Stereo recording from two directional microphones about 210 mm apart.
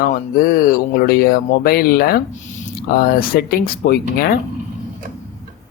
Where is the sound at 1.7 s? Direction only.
45° left (ahead or behind).